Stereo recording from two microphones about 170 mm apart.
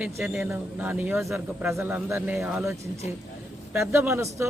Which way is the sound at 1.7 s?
15° right (ahead or behind).